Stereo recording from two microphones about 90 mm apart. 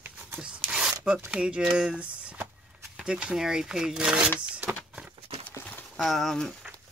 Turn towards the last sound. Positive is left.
turn(degrees=5)  # may be behind; listen again after turning